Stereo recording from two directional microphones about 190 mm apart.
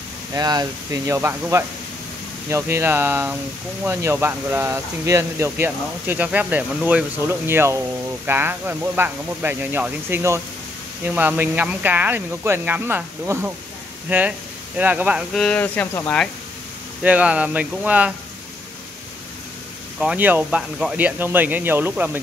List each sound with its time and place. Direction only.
0.3 s speech: 20° right (ahead or behind)
15.4 s speech: 5° left (ahead or behind)
17.0 s speech: 5° right (ahead or behind)
20.0 s speech: 5° right (ahead or behind)